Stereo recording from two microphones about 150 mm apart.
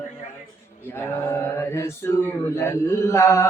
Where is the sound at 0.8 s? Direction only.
15° left (ahead or behind).